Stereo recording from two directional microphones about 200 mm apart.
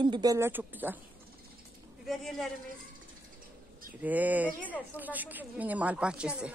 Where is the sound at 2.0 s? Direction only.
Centre (ahead or behind).